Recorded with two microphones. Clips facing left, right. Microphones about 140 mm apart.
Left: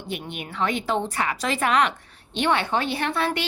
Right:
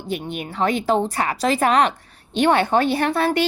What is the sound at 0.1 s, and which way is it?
A woman's voice, 40° right (ahead or behind).